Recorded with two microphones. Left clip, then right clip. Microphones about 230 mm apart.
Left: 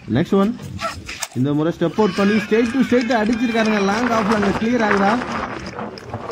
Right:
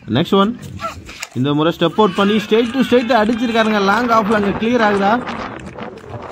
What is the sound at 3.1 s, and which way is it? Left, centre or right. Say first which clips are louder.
Speech: right 4 dB; centre.